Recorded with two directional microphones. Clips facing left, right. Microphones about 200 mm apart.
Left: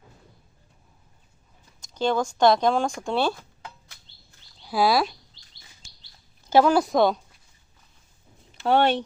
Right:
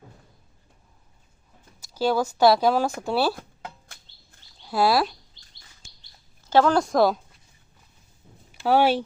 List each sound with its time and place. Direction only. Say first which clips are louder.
1.8 s speech: right 1 dB; 5° right (ahead or behind)
4.6 s speech: even; centre (ahead or behind)
5.4 s chirp: even; 50° right (ahead or behind)
6.5 s speech: left 1 dB; 10° left (ahead or behind)
8.6 s speech: right 1 dB; 5° right (ahead or behind)